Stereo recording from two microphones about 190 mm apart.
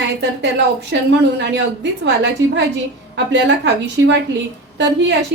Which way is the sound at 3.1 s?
70° right (ahead or behind).